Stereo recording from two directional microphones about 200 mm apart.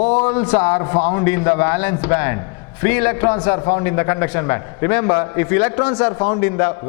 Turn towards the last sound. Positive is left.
turn(degrees=10)  # may be behind; listen again after turning